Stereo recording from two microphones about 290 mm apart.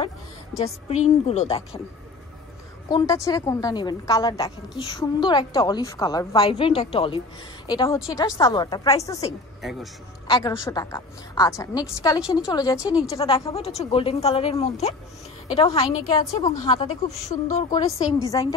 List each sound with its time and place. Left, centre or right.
0.8 s a woman's voice: left
2.9 s a woman's voice: centre
9.6 s speech: centre
10.3 s a woman's voice: centre
12.8 s a woman's voice: centre
13.1 s a woman's voice: centre